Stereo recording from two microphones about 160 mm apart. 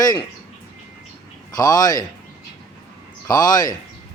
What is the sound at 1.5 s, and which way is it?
Speech, 25° left (ahead or behind).